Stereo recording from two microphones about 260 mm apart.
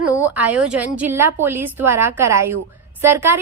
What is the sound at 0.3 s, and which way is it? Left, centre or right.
Speech, centre.